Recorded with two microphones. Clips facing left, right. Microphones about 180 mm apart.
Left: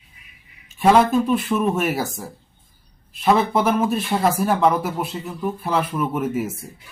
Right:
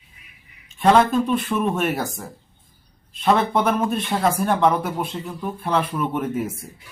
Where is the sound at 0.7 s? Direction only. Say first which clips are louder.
Left 1 dB; 5° left (ahead or behind).